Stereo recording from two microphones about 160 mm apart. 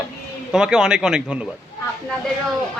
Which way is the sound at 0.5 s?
5° right (ahead or behind).